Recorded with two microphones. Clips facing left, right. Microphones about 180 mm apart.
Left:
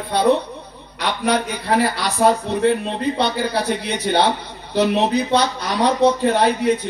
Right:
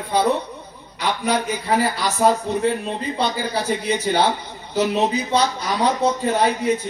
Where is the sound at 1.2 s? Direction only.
70° left (ahead or behind).